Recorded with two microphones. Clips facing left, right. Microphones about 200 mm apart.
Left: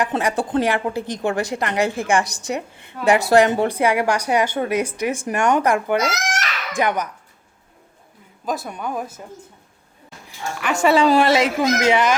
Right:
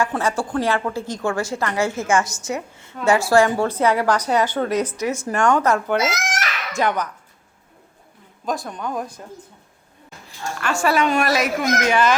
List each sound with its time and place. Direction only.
0.0 s a woman's voice: 15° left (ahead or behind)
8.4 s a woman's voice: 5° left (ahead or behind)
10.2 s a woman's voice: 15° left (ahead or behind)